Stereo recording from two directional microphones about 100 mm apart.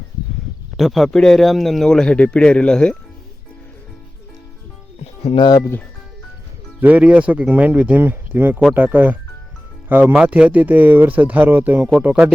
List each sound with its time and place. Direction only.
0.8 s speech: centre (ahead or behind)
5.4 s speech: 45° left (ahead or behind)
6.8 s speech: 15° right (ahead or behind)